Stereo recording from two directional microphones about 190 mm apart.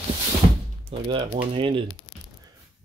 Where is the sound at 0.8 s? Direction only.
30° right (ahead or behind).